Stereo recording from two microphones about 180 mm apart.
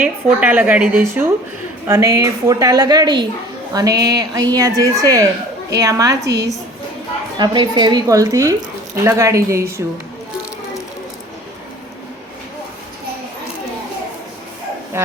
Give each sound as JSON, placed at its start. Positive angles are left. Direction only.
{"t": 0.0, "sound": "a woman's voice", "side_deg": -10}
{"t": 14.9, "sound": "a woman's voice", "side_deg": -15}